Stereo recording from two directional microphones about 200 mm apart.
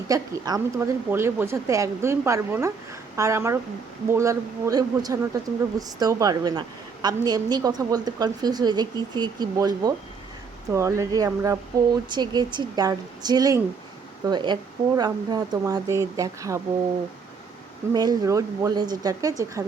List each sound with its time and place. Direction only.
0.1 s a woman's voice: 15° right (ahead or behind)
17.9 s a woman's voice: 20° right (ahead or behind)